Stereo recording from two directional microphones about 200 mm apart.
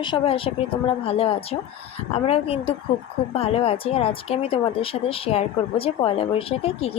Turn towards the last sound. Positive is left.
turn(degrees=30)  # may be behind; listen again after turning